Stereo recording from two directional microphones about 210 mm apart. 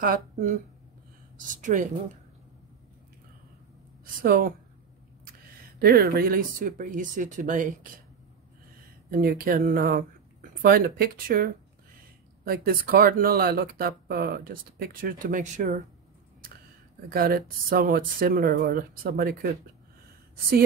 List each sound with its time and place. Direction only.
0.0 s speech: 40° right (ahead or behind)
4.0 s speech: 40° right (ahead or behind)
5.8 s speech: 45° right (ahead or behind)
9.1 s speech: 45° right (ahead or behind)
17.1 s speech: 45° right (ahead or behind)